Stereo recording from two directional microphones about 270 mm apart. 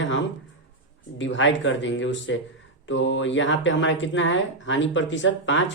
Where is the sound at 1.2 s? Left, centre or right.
Left.